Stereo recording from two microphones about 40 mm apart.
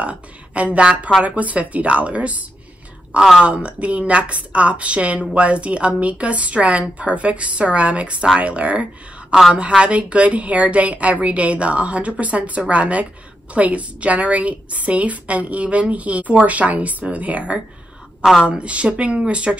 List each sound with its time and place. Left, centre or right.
0.0 s a woman's voice: right